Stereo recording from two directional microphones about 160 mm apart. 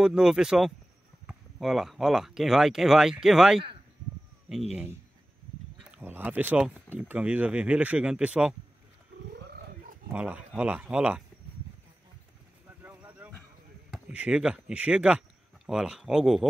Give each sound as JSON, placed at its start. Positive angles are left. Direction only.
{"t": 0.0, "sound": "speech", "side_deg": -5}
{"t": 5.9, "sound": "speech", "side_deg": -10}
{"t": 9.3, "sound": "roaring cats", "side_deg": -75}
{"t": 10.1, "sound": "speech", "side_deg": -10}
{"t": 12.6, "sound": "a sound", "side_deg": -10}
{"t": 14.0, "sound": "speech", "side_deg": -10}